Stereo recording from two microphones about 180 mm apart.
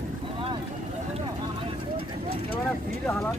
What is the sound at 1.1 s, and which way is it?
Vehicle, 30° right (ahead or behind).